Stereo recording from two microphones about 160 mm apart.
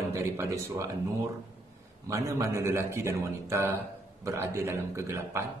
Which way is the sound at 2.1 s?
20° right (ahead or behind).